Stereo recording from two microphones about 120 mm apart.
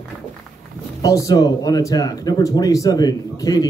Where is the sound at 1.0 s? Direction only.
25° left (ahead or behind).